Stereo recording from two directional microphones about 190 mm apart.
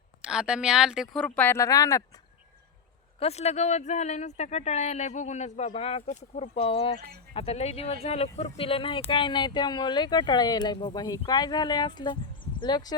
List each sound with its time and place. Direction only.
0.2 s speech: 5° right (ahead or behind); by 2.0 s 20° left (ahead or behind)
3.2 s speech: 35° left (ahead or behind)